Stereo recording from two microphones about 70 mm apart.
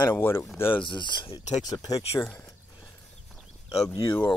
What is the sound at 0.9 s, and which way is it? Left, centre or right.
Speech, left.